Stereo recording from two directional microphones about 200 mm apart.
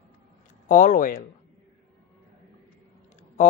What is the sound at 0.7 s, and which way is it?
Speech, 40° left (ahead or behind).